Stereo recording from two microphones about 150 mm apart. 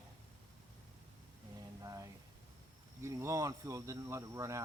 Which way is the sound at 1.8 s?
20° right (ahead or behind).